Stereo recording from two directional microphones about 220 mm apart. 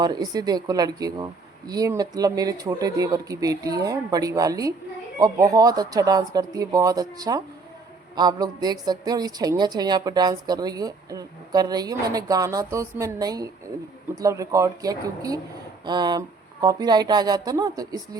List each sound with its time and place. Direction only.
0.0 s a woman's voice: 20° right (ahead or behind)